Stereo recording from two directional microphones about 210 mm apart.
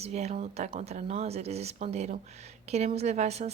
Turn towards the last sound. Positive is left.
turn(degrees=-30)  # may be behind; listen again after turning